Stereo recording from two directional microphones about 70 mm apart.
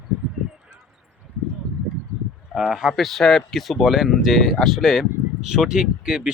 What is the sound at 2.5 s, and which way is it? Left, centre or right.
Speech, centre.